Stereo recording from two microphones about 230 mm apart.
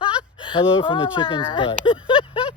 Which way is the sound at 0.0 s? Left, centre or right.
Left.